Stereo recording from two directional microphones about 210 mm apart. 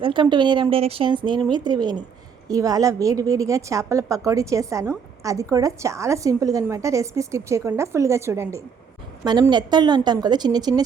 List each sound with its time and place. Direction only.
0.0 s a woman's voice: 25° right (ahead or behind)